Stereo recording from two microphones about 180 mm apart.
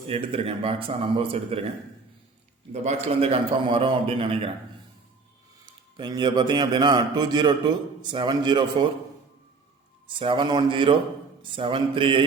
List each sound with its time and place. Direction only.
0.1 s a man's voice: 30° right (ahead or behind)
2.7 s a man's voice: 40° right (ahead or behind)
5.6 s a man's voice: 25° right (ahead or behind)
10.1 s a man's voice: 30° right (ahead or behind)